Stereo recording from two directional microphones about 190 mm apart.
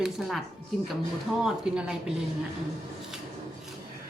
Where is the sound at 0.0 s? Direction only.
Centre (ahead or behind).